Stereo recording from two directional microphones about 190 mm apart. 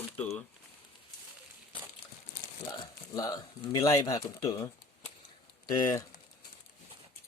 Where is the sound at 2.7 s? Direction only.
20° left (ahead or behind).